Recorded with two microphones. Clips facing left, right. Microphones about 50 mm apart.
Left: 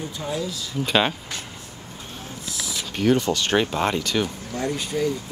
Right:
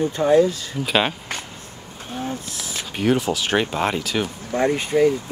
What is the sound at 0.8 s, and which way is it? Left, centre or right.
Speech, centre.